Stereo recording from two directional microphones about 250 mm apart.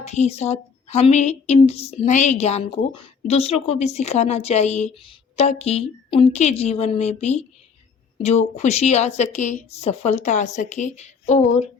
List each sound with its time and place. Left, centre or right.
0.0 s a woman's voice: left